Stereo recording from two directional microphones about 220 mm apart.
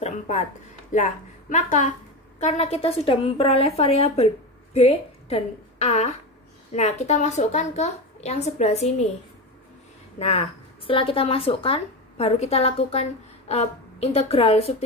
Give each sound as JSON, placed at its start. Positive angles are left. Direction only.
{"t": 0.9, "sound": "a woman's voice", "side_deg": 35}
{"t": 10.1, "sound": "a woman's voice", "side_deg": 30}